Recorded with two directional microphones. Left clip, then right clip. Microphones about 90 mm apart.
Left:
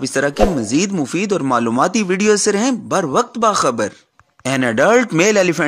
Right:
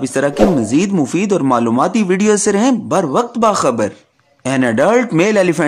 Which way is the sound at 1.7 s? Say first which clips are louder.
Right 1 dB; 40° left (ahead or behind).